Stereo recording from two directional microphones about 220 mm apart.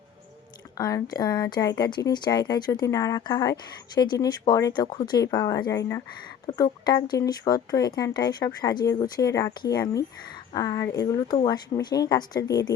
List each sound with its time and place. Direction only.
0.8 s a woman's voice: 15° left (ahead or behind)